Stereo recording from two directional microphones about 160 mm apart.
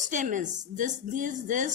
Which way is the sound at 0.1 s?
50° right (ahead or behind).